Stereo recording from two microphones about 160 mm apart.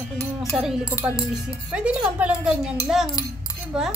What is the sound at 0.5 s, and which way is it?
Speech, 5° right (ahead or behind).